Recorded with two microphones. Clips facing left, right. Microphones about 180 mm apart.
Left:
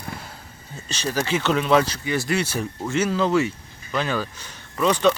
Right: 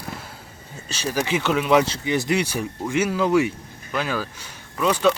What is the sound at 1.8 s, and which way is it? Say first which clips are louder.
Speech: right 2 dB; 20° right (ahead or behind).